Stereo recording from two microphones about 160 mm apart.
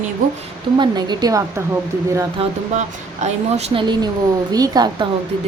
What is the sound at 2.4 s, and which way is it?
A woman's voice, 35° right (ahead or behind).